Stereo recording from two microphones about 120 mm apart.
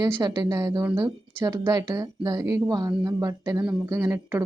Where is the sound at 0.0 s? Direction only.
30° right (ahead or behind).